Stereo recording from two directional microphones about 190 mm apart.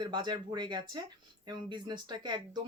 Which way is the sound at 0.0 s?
25° right (ahead or behind).